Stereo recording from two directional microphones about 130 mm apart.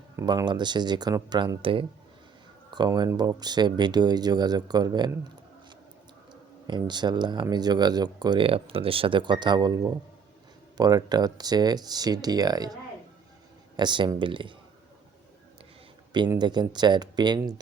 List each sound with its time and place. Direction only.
0.2 s speech: 30° right (ahead or behind)
6.7 s speech: 35° right (ahead or behind)
16.4 s speech: 35° right (ahead or behind)